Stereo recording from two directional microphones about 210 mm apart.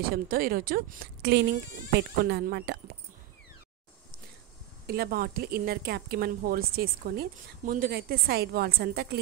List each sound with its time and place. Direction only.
0.0 s speech: 45° right (ahead or behind)
4.8 s speech: 45° right (ahead or behind)